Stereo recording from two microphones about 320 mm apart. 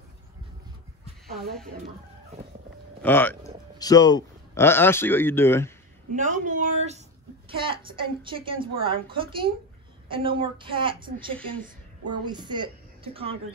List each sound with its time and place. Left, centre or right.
3.0 s a man's voice: centre
6.1 s a woman's voice: right